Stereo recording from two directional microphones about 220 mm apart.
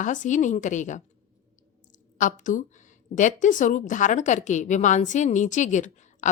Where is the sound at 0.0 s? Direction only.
35° left (ahead or behind).